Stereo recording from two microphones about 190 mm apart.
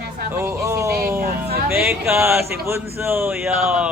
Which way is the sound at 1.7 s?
5° right (ahead or behind).